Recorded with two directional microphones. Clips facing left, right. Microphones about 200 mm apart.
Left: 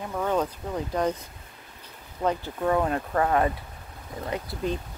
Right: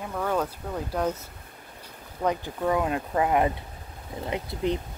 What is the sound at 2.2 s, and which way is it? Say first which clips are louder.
Speech: even; 10° right (ahead or behind).